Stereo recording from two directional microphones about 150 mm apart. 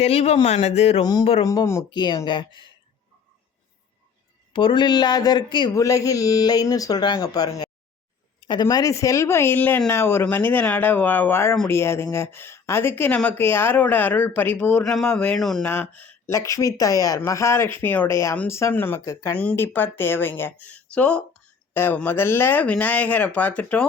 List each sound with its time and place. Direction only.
0.0 s speech: 45° left (ahead or behind)
1.0 s speech: 25° left (ahead or behind)
1.9 s speech: 30° left (ahead or behind)
4.5 s speech: 30° left (ahead or behind); by 23.8 s 10° left (ahead or behind)